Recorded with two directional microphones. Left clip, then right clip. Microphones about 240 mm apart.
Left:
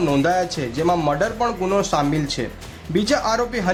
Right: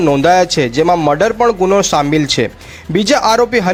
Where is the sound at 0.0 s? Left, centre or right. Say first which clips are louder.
Right 9 dB; right.